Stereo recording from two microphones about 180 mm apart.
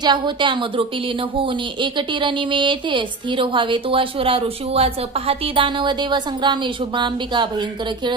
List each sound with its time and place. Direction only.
0.0 s speech: 25° right (ahead or behind)